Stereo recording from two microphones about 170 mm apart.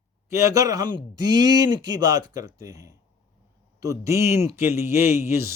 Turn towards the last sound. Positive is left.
turn(degrees=-15)  # may be behind; listen again after turning